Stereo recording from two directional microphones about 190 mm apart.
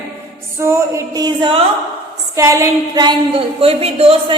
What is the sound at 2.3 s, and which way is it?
A woman's voice, 15° right (ahead or behind).